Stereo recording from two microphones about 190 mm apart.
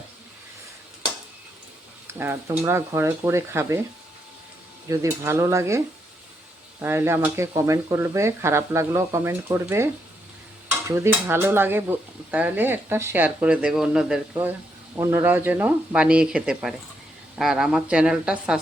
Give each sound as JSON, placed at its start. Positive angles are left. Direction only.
{"t": 2.1, "sound": "stir", "side_deg": -10}
{"t": 4.9, "sound": "stir", "side_deg": -15}
{"t": 17.3, "sound": "speech", "side_deg": 0}